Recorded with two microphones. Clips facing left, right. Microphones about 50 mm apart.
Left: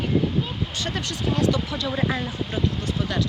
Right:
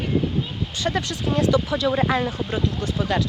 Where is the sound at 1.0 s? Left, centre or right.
Centre.